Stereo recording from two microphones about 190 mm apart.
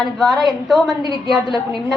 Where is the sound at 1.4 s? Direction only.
25° left (ahead or behind).